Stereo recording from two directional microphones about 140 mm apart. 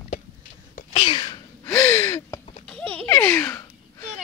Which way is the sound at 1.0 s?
35° left (ahead or behind).